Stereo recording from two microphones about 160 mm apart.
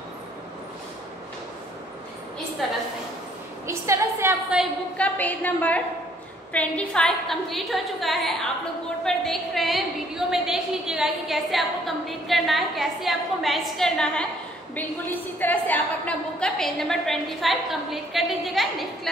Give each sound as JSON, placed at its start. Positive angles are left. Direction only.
{"t": 3.6, "sound": "a woman's voice", "side_deg": -20}
{"t": 4.9, "sound": "a woman's voice", "side_deg": 10}